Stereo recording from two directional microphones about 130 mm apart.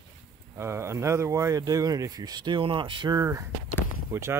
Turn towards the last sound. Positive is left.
turn(degrees=-20)  # may be behind; listen again after turning